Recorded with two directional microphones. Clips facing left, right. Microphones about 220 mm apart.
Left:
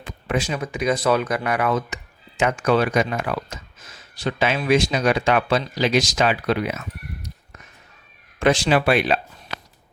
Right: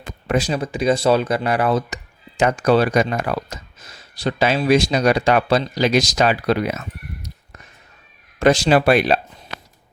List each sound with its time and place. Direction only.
0.0 s speech: 40° right (ahead or behind)
8.4 s speech: 40° right (ahead or behind)